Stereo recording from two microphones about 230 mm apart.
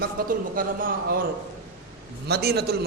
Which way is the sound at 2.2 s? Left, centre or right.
Right.